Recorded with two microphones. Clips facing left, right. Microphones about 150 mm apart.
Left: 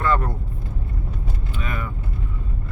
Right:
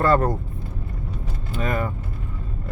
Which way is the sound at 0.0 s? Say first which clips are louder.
Right 4 dB; 40° right (ahead or behind).